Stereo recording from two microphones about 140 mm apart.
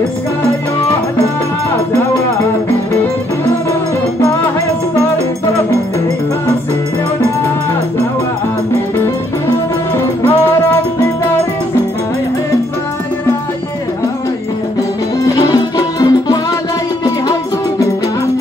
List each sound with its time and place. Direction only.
15.2 s music: 25° left (ahead or behind)